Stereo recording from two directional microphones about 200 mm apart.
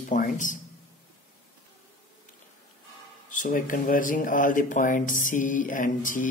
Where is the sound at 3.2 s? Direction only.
40° left (ahead or behind).